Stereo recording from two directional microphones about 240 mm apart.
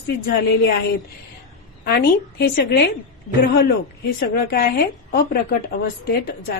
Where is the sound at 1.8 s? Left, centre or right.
Left.